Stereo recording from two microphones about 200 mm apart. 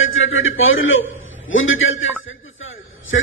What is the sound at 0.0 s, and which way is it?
A man's voice, 80° left.